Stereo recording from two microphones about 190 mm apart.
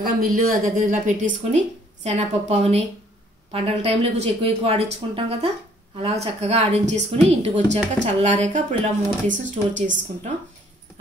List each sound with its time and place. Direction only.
0.0 s speech: 50° right (ahead or behind)